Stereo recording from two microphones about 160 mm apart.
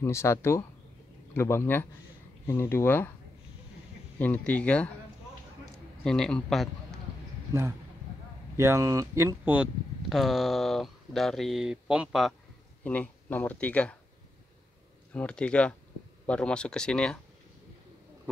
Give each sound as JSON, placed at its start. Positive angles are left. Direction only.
{"t": 0.0, "sound": "speech", "side_deg": 15}
{"t": 4.2, "sound": "speech", "side_deg": 10}
{"t": 6.0, "sound": "speech", "side_deg": 5}
{"t": 7.5, "sound": "speech", "side_deg": -25}
{"t": 15.1, "sound": "speech", "side_deg": 5}